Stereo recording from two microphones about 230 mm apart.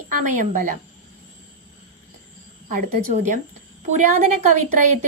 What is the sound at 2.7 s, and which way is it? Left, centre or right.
Speech, right.